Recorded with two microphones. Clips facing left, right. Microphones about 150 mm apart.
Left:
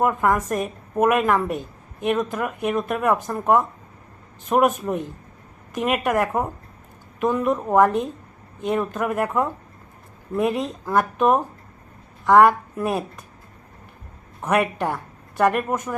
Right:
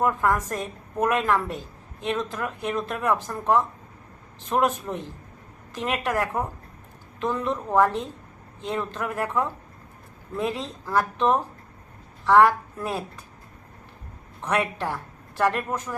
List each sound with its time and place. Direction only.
0.0 s a woman's voice: 20° left (ahead or behind)
14.4 s speech: 20° left (ahead or behind)